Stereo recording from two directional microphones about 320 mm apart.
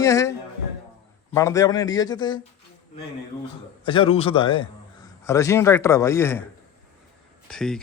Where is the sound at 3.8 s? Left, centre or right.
Centre.